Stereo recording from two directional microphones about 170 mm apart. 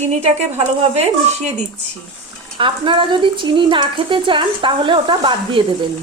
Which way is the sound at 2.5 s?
30° right (ahead or behind).